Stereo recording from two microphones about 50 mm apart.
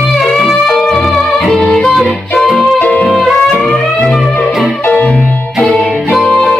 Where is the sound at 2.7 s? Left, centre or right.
Left.